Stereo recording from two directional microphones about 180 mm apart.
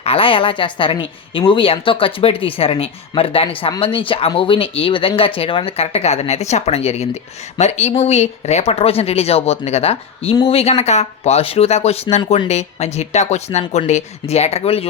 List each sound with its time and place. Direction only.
0.0 s speech: 30° left (ahead or behind)